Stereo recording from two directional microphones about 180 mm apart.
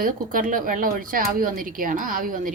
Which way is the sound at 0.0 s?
50° right (ahead or behind).